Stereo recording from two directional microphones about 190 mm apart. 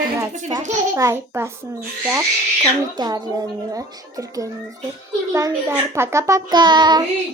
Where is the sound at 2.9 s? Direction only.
20° right (ahead or behind).